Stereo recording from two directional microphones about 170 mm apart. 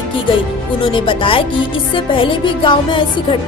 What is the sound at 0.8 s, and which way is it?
Speech, 30° left (ahead or behind).